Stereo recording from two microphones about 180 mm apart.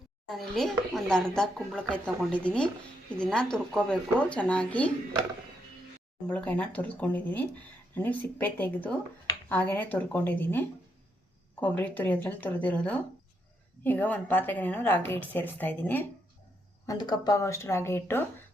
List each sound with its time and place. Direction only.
0.3 s speech: centre (ahead or behind)
6.2 s a woman's voice: 5° left (ahead or behind)
16.8 s a woman's voice: 20° left (ahead or behind)